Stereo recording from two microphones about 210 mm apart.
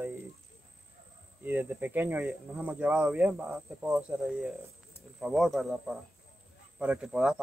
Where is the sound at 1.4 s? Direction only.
10° right (ahead or behind).